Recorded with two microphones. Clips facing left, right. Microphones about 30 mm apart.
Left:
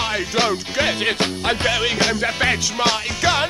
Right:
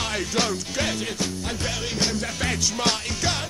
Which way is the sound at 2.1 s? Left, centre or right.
Left.